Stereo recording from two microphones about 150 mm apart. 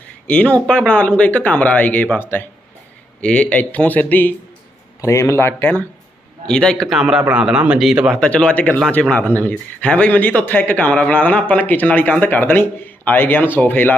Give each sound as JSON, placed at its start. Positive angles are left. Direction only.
{"t": 0.3, "sound": "speech", "side_deg": 10}